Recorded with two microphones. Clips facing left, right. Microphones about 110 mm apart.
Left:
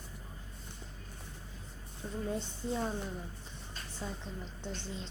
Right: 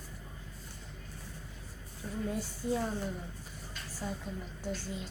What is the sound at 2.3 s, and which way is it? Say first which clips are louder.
Speech: right 3 dB; 25° left (ahead or behind).